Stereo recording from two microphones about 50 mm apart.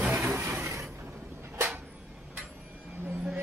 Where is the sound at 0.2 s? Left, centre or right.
Right.